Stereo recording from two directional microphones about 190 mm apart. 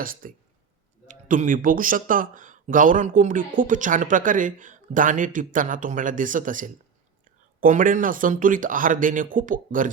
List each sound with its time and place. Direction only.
0.0 s speech: 45° right (ahead or behind)